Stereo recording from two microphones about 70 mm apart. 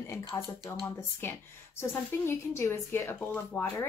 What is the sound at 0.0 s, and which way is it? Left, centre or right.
Speech, left.